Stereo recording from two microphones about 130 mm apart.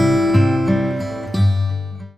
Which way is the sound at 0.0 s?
Centre (ahead or behind).